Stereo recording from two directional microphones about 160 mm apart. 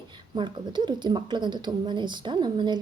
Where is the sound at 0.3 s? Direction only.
30° right (ahead or behind).